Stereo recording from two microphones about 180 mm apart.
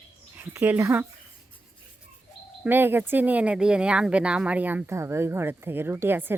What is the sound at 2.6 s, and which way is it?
Speech, 10° right (ahead or behind).